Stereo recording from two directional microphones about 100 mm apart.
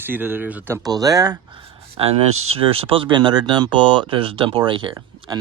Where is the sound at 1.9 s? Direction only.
85° right; by 4.9 s 55° right (ahead or behind).